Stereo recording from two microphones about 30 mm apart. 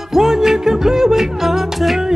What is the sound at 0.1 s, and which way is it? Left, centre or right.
Music, centre.